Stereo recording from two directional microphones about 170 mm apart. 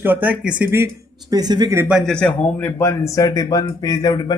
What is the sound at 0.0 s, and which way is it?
Speech, 10° right (ahead or behind).